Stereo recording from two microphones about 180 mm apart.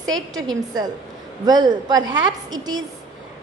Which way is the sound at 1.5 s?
25° right (ahead or behind).